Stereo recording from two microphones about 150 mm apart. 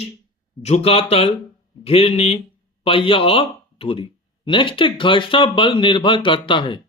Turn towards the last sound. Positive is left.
turn(degrees=35)  # may be behind; listen again after turning